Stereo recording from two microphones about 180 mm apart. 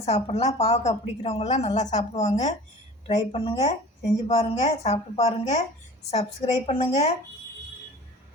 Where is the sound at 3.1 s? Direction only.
25° left (ahead or behind).